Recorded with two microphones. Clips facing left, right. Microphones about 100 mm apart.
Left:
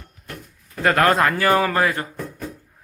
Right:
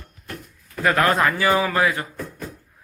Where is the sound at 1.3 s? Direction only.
55° left (ahead or behind).